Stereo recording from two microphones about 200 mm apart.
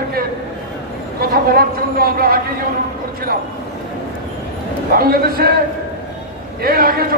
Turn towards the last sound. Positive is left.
turn(degrees=-50)  # may be behind; listen again after turning